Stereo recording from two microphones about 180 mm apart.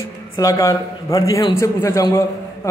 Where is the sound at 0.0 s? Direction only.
15° left (ahead or behind).